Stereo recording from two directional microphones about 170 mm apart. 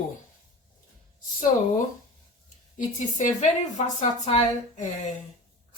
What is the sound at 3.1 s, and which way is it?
A woman's voice, 45° left (ahead or behind).